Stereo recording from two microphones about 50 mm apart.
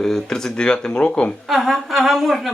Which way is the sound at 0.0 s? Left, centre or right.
Centre.